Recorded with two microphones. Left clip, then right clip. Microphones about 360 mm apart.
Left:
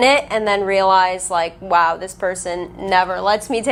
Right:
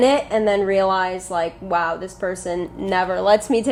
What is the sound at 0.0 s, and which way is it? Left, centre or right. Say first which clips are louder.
A woman's voice: left 2 dB; left.